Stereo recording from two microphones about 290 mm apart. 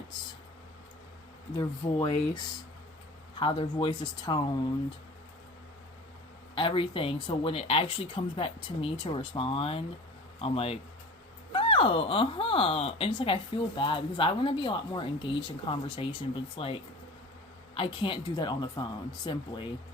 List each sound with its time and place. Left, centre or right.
1.5 s speech: centre
6.6 s speech: centre